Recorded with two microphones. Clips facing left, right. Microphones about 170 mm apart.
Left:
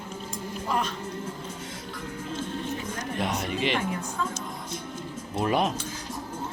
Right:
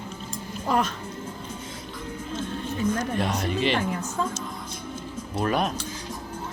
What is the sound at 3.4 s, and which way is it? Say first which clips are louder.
Speech: right 3 dB; 15° left (ahead or behind).